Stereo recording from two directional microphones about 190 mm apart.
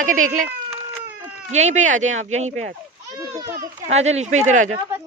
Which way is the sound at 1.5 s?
35° right (ahead or behind).